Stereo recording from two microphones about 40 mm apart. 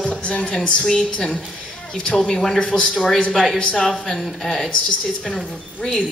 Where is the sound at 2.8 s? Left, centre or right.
Centre.